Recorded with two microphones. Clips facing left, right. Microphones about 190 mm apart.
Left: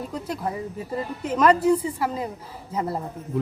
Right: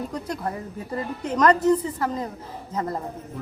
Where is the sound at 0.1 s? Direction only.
5° left (ahead or behind).